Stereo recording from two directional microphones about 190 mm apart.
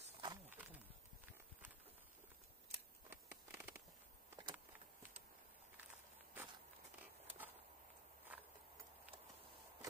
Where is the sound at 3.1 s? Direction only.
10° right (ahead or behind).